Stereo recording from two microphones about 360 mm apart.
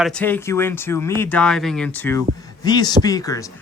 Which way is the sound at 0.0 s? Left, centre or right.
Centre.